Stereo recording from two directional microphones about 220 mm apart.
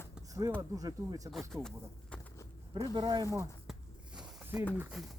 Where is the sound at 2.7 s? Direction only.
25° right (ahead or behind).